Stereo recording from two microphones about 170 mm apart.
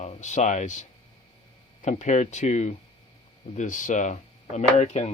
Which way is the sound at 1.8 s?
45° left (ahead or behind).